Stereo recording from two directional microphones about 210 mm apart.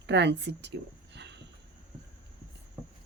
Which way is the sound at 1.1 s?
55° right (ahead or behind).